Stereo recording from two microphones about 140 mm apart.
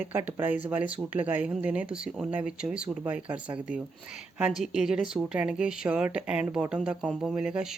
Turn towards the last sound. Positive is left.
turn(degrees=-5)  # may be behind; listen again after turning